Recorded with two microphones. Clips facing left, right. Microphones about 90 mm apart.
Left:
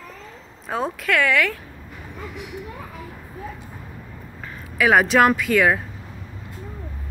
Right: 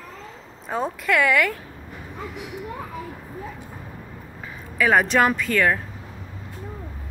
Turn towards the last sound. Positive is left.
turn(degrees=10)  # may be behind; listen again after turning